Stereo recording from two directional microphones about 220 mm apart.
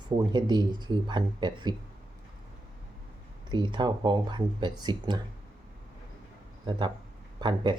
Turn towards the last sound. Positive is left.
turn(degrees=-20)  # may be behind; listen again after turning